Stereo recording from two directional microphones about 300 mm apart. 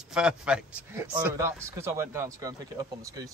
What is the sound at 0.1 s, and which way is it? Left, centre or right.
Speech, centre.